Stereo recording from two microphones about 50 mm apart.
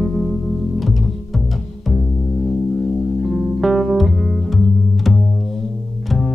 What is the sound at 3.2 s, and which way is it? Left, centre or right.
Music, centre.